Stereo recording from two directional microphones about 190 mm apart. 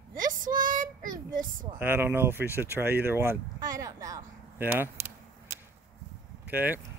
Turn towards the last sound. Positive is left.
turn(degrees=-10)  # may be behind; listen again after turning